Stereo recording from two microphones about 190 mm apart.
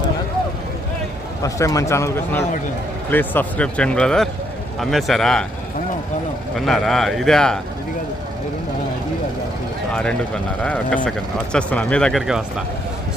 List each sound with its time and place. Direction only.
1.4 s a man's voice: 15° left (ahead or behind)
6.6 s speech: centre (ahead or behind)
9.9 s a man's voice: 5° left (ahead or behind)